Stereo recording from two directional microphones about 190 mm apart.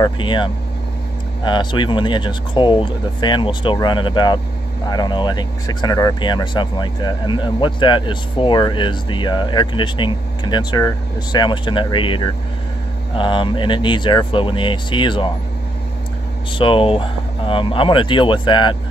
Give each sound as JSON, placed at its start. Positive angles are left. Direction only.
{"t": 0.0, "sound": "speech", "side_deg": 25}
{"t": 16.5, "sound": "speech", "side_deg": 25}